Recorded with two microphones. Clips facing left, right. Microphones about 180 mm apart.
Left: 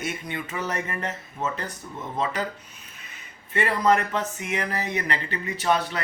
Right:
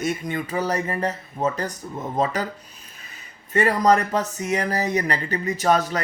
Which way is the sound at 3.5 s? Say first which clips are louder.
Right 4 dB; 40° right (ahead or behind).